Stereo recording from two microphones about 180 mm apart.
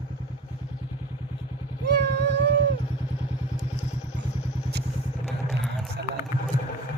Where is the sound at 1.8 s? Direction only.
70° right (ahead or behind).